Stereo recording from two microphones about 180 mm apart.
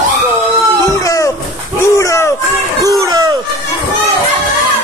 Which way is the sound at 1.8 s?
15° left (ahead or behind).